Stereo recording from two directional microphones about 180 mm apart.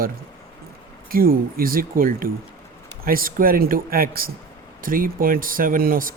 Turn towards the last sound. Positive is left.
turn(degrees=-50)  # may be behind; listen again after turning